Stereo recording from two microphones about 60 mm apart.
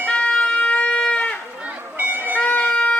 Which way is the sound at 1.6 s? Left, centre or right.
Right.